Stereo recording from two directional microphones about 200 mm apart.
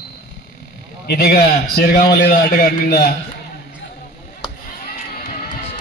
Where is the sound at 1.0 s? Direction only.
50° left (ahead or behind).